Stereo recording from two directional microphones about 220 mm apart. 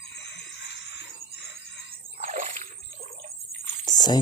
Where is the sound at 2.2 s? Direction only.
35° right (ahead or behind).